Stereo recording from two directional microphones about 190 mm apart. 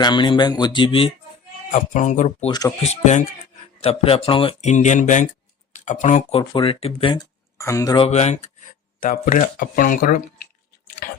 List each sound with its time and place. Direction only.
0.0 s speech: 25° left (ahead or behind)
1.7 s speech: 40° left (ahead or behind)
2.5 s speech: 20° left (ahead or behind)
2.8 s speech: 35° left (ahead or behind)
6.4 s speech: 25° left (ahead or behind)
7.6 s speech: 15° left (ahead or behind)
8.0 s speech: 35° left (ahead or behind)